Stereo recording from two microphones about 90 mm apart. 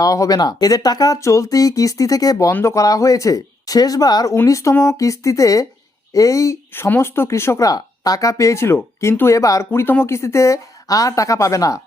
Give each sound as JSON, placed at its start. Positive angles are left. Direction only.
{"t": 0.0, "sound": "speech", "side_deg": 40}
{"t": 2.5, "sound": "speech", "side_deg": 25}
{"t": 2.7, "sound": "speech", "side_deg": 40}
{"t": 4.4, "sound": "speech", "side_deg": 35}
{"t": 6.7, "sound": "speech", "side_deg": 25}
{"t": 7.7, "sound": "speech", "side_deg": 45}
{"t": 9.8, "sound": "speech", "side_deg": 25}